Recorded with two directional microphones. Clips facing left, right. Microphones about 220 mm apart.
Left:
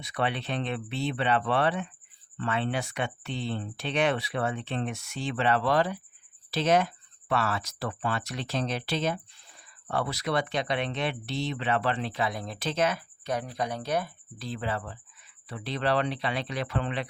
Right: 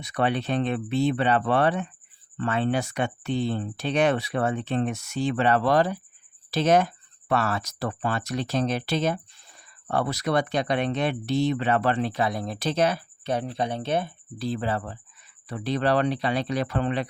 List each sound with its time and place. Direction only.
0.0 s speech: 45° right (ahead or behind)